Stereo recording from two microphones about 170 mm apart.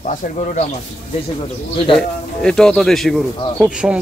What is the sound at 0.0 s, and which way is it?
Speech, 50° left (ahead or behind).